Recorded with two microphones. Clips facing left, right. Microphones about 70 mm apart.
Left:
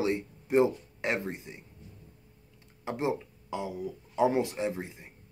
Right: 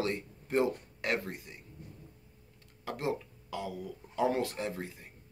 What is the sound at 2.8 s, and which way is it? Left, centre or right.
Speech, left.